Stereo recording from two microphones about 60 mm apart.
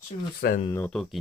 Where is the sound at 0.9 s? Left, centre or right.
Centre.